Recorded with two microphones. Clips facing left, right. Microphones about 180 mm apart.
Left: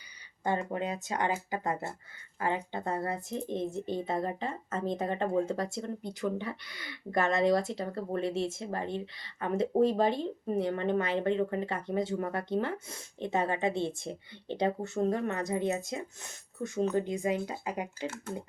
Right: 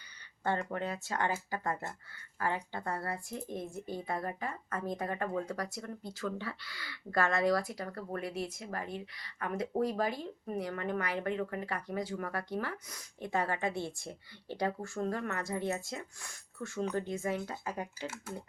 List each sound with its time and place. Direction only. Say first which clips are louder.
0.4 s a woman's voice: left 3 dB; 15° left (ahead or behind)
18.0 s speech: left 4 dB; 10° right (ahead or behind)